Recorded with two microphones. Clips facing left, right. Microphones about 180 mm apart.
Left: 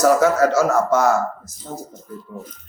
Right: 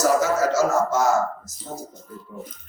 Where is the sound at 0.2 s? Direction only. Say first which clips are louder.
Left 4 dB; 60° left (ahead or behind).